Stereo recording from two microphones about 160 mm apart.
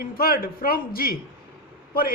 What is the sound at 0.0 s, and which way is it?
A man's voice, 70° left (ahead or behind).